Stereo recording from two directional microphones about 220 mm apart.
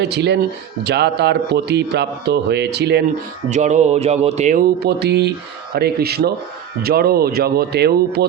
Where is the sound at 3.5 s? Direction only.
30° right (ahead or behind).